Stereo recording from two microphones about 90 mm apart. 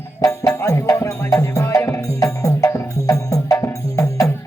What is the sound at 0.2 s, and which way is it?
Music, 35° left (ahead or behind).